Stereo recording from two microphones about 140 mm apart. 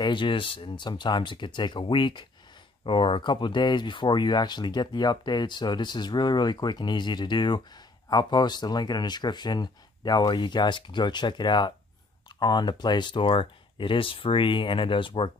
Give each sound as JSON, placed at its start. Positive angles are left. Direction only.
{"t": 0.0, "sound": "speech", "side_deg": 35}